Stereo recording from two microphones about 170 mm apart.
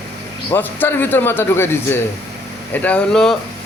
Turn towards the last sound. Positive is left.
turn(degrees=5)  # may be behind; listen again after turning